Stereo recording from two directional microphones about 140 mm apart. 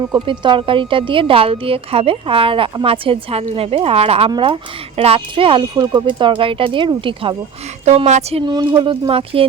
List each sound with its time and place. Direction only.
0.1 s a woman's voice: 35° right (ahead or behind)
7.9 s a woman's voice: 55° right (ahead or behind)
8.4 s a woman's voice: 30° right (ahead or behind)